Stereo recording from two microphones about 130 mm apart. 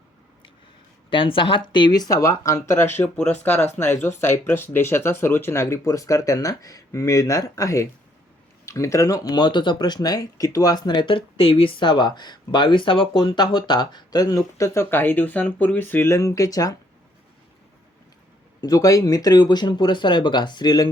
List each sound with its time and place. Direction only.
1.1 s speech: 40° left (ahead or behind); by 16.7 s 25° left (ahead or behind)
18.6 s speech: 30° left (ahead or behind)